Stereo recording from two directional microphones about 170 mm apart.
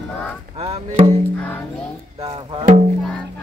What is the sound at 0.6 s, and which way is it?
Music, 40° right (ahead or behind).